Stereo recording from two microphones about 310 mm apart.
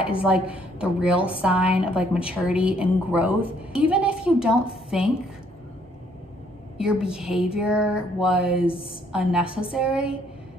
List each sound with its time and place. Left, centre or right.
0.2 s a woman's voice: centre
6.8 s a woman's voice: centre
8.6 s a woman's voice: centre
9.1 s a woman's voice: centre